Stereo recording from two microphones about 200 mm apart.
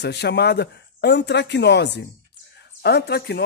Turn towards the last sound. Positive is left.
turn(degrees=55)  # may be behind; listen again after turning